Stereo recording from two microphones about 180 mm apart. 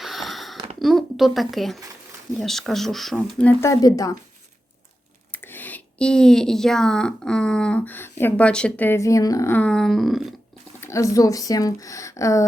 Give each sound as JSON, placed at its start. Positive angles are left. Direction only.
{"t": 0.0, "sound": "sniff", "side_deg": 0}
{"t": 0.8, "sound": "speech", "side_deg": 0}
{"t": 3.3, "sound": "a woman's voice", "side_deg": 10}
{"t": 5.3, "sound": "a woman's voice", "side_deg": 10}
{"t": 10.8, "sound": "a woman's voice", "side_deg": 15}